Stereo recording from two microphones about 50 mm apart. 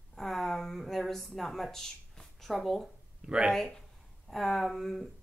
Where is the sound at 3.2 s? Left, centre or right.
Right.